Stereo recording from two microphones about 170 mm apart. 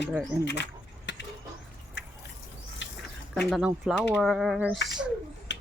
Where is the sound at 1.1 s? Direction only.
90° left.